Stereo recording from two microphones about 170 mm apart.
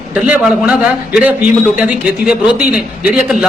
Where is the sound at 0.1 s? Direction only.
5° right (ahead or behind).